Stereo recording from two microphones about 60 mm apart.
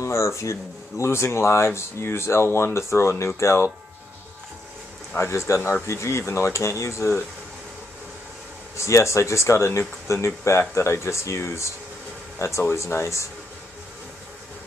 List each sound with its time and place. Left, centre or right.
0.0 s speech: left
5.1 s speech: left
8.7 s speech: left